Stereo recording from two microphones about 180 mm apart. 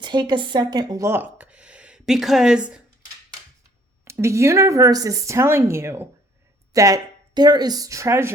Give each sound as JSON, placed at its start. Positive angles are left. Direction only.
{"t": 0.0, "sound": "speech", "side_deg": -25}
{"t": 4.0, "sound": "speech", "side_deg": -15}